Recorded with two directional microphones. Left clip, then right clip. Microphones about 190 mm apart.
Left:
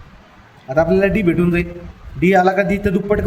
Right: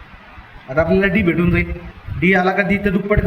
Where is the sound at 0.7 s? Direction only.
70° left (ahead or behind).